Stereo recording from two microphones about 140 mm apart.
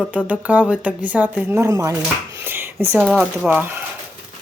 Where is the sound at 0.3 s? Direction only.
10° right (ahead or behind).